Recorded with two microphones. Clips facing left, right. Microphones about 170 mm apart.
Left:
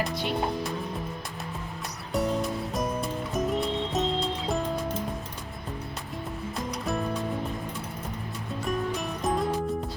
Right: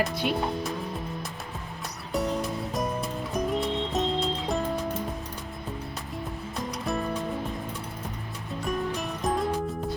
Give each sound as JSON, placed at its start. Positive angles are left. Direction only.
{"t": 2.1, "sound": "music", "side_deg": 0}
{"t": 6.7, "sound": "music", "side_deg": 0}
{"t": 8.6, "sound": "music", "side_deg": 0}